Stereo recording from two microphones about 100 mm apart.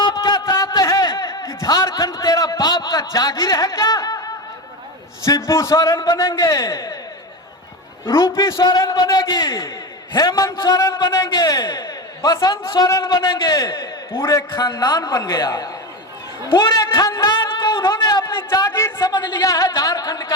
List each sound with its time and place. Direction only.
0.0 s a sound: 45° left (ahead or behind)
5.2 s a man's voice: 30° left (ahead or behind)
8.0 s a man's voice: 25° left (ahead or behind)
8.6 s a man's voice: 45° left (ahead or behind)
10.1 s a man's voice: 45° left (ahead or behind)
12.3 s a man's voice: 55° left (ahead or behind)
12.9 s a man's voice: 35° left (ahead or behind)
13.2 s a man's voice: 45° left (ahead or behind)
14.2 s a man's voice: 25° left (ahead or behind)
14.5 s a man's voice: 50° left (ahead or behind)
17.5 s a sound: 55° left (ahead or behind)
18.5 s a man's voice: 40° left (ahead or behind)